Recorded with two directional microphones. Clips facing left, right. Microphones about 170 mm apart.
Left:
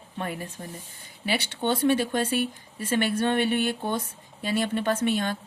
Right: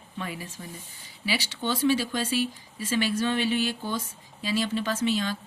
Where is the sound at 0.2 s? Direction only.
55° left (ahead or behind).